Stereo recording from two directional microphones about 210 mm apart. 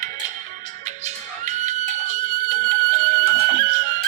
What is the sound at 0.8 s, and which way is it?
Music, 35° right (ahead or behind).